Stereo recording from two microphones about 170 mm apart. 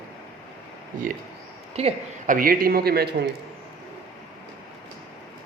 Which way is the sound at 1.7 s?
35° right (ahead or behind).